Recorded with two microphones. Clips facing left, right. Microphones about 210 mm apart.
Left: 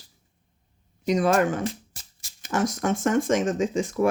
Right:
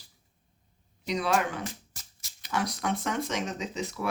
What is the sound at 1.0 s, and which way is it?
Speech, 45° left (ahead or behind).